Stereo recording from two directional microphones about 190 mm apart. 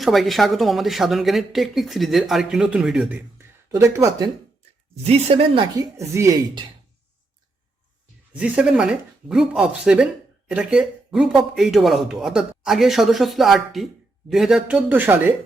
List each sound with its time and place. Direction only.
0.0 s a woman's voice: centre (ahead or behind); by 4.3 s 15° right (ahead or behind)
5.0 s speech: 30° right (ahead or behind)
6.0 s speech: 15° right (ahead or behind)
8.3 s a woman's voice: 5° right (ahead or behind)